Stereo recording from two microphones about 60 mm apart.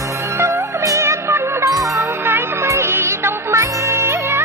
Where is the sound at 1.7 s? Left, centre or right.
Right.